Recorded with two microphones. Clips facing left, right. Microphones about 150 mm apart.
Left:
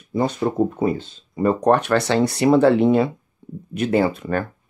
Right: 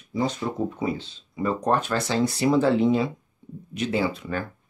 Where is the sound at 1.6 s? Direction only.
70° left (ahead or behind).